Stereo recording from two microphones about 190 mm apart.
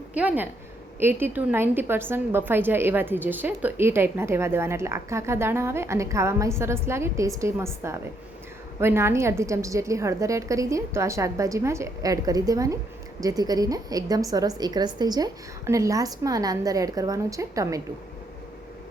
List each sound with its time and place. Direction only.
0.1 s a woman's voice: 5° right (ahead or behind)